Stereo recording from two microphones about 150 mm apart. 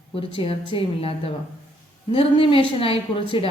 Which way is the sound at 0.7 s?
40° left (ahead or behind).